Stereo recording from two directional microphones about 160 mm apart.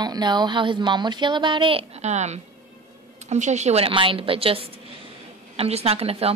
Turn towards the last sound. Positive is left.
turn(degrees=-40)  # may be behind; listen again after turning